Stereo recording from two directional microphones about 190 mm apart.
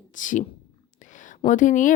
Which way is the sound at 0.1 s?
40° left (ahead or behind).